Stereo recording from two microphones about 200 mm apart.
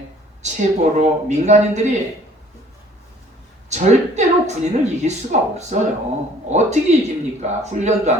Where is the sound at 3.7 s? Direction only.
35° right (ahead or behind).